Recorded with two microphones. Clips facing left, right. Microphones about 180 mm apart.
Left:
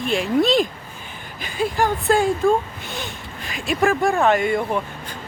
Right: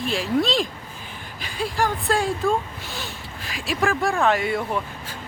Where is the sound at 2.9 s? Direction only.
Centre (ahead or behind).